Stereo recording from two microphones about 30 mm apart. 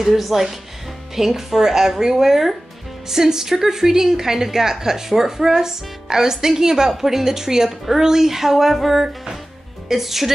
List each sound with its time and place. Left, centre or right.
0.0 s a woman's voice: centre